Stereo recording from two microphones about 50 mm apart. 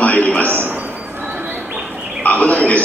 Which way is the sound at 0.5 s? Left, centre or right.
Right.